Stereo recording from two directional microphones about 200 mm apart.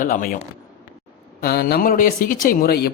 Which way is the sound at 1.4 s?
50° left (ahead or behind).